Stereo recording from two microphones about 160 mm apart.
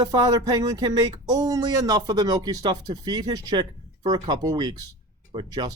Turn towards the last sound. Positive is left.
turn(degrees=-25)  # may be behind; listen again after turning